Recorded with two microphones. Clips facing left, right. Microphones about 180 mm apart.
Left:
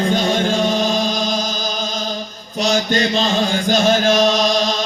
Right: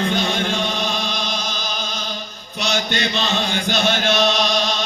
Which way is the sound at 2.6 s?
40° left (ahead or behind).